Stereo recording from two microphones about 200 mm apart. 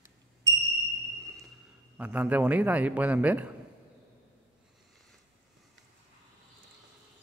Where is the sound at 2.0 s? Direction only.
5° right (ahead or behind).